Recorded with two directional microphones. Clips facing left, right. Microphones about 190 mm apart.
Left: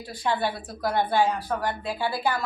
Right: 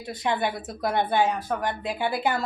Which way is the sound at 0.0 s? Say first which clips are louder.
Even; 20° right (ahead or behind).